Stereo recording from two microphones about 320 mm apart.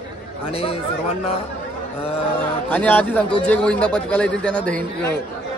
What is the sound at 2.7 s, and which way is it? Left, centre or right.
A man's voice, centre.